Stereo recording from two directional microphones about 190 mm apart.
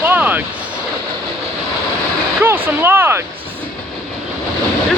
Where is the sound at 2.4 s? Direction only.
10° right (ahead or behind).